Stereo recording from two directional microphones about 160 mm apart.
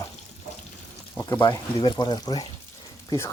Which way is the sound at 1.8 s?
30° left (ahead or behind).